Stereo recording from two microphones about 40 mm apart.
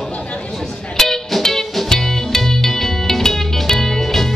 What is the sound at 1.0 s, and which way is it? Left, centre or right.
Music, centre.